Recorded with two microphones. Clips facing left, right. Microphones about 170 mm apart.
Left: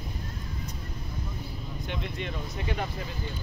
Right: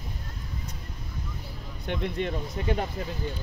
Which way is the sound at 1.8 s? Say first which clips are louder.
Right 7 dB; 50° right (ahead or behind).